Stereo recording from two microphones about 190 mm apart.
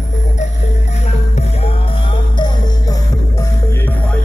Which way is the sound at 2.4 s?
15° left (ahead or behind).